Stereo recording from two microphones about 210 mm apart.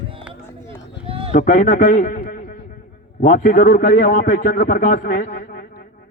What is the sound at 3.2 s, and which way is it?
A man's voice, 40° left (ahead or behind).